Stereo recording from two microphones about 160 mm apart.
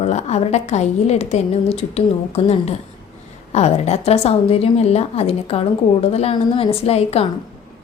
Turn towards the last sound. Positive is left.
turn(degrees=40)  # may be behind; listen again after turning